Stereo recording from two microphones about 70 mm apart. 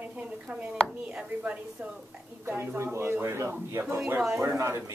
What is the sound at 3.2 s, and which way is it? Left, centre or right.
Speech, right.